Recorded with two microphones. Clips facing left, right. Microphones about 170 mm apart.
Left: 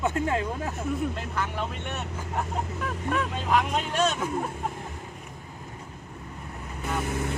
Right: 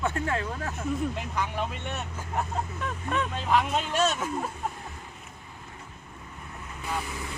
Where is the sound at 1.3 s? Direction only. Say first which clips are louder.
Even; 10° right (ahead or behind).